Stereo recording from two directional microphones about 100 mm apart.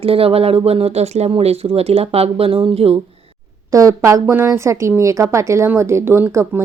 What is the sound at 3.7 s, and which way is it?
Speech, 35° right (ahead or behind).